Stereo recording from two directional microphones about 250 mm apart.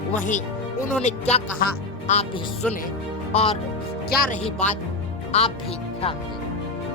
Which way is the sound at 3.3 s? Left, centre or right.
Left.